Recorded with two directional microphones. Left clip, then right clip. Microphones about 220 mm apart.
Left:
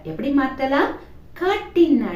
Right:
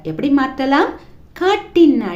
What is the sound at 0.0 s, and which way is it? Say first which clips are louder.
A woman's voice: right 5 dB; 50° right (ahead or behind).